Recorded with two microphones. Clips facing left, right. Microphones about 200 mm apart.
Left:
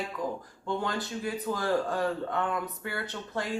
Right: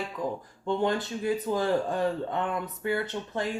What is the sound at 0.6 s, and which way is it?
Speech, 20° right (ahead or behind).